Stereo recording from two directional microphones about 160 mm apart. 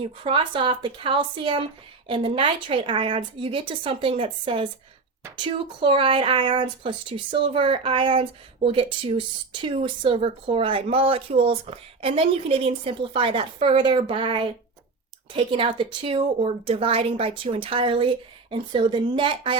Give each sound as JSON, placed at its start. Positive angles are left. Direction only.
{"t": 0.0, "sound": "speech", "side_deg": -35}